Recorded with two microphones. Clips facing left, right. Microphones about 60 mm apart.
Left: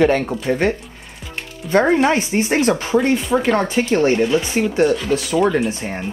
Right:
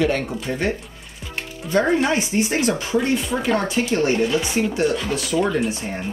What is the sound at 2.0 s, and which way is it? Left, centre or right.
Speech, left.